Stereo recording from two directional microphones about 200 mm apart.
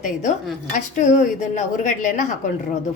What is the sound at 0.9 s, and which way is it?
A woman's voice, 35° left (ahead or behind).